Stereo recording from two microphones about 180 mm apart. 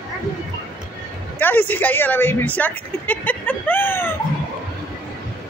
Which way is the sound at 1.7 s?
10° left (ahead or behind).